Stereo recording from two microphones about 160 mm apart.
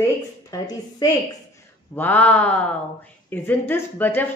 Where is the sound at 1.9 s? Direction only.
10° left (ahead or behind).